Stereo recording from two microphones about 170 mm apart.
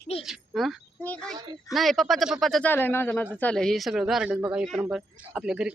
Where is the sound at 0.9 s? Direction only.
10° left (ahead or behind).